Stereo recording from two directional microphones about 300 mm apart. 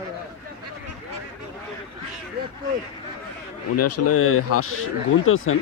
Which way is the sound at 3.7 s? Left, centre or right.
Left.